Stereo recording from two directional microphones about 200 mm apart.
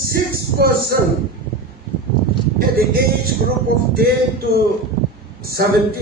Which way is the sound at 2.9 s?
50° right (ahead or behind).